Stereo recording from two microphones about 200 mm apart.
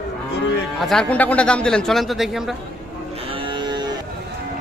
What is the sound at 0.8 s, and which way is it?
Speech, centre (ahead or behind).